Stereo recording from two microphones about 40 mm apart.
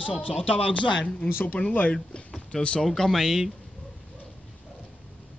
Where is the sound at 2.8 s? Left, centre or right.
Centre.